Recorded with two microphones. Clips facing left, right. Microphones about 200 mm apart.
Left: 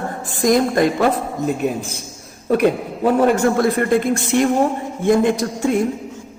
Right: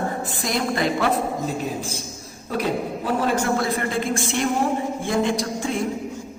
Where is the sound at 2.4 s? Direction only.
60° left (ahead or behind).